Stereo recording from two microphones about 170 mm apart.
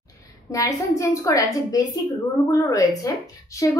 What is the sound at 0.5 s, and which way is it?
A woman's voice, 20° left (ahead or behind).